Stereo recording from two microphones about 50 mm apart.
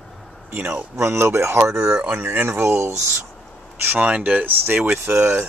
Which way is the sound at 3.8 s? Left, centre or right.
Right.